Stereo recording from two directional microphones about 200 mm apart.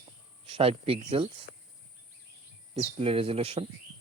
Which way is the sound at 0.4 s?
30° right (ahead or behind).